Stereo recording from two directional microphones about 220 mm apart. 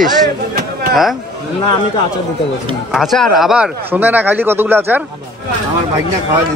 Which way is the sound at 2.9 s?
Centre (ahead or behind).